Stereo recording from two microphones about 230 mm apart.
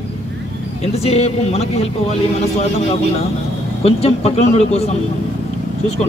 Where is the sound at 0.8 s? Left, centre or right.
Left.